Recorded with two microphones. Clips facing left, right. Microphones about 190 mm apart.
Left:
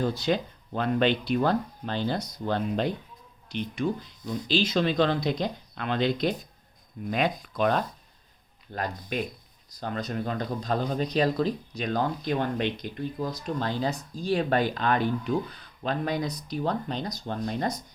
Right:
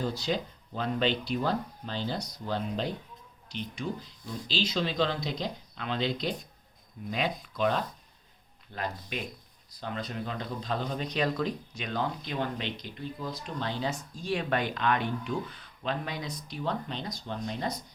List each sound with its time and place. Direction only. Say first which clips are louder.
0.0 s speech: left 5 dB; 55° left (ahead or behind)
7.5 s speech: left 1 dB; 50° left (ahead or behind)